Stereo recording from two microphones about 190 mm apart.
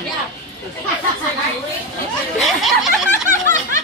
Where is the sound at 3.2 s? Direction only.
40° right (ahead or behind).